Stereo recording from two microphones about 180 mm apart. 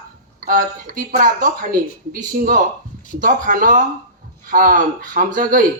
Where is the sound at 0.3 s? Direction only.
50° right (ahead or behind).